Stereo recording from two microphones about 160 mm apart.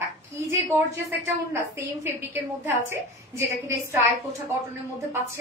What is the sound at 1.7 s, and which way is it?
A woman's voice, 15° right (ahead or behind).